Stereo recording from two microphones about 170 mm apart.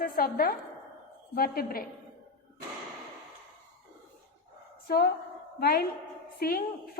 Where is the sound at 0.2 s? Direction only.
60° left (ahead or behind).